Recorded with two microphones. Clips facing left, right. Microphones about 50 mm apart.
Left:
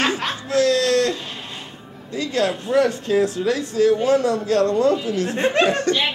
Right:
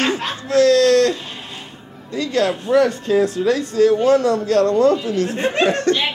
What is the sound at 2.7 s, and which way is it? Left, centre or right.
Speech, centre.